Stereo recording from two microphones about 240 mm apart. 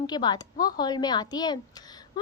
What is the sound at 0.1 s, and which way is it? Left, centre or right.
A woman's voice, centre.